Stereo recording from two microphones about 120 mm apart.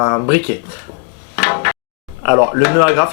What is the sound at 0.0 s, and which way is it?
Speech, 15° left (ahead or behind).